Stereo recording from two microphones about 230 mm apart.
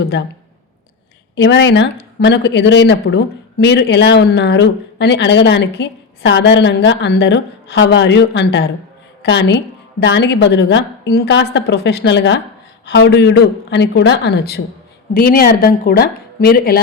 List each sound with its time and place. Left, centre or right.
1.4 s a woman's voice: left